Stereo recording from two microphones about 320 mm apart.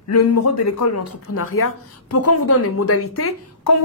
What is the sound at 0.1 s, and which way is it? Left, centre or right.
Speech, left.